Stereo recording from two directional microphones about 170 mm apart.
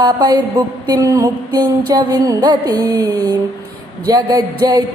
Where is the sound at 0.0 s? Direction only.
25° right (ahead or behind).